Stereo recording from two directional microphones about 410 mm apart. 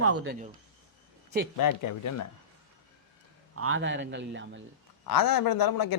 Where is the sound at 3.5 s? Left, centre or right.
Right.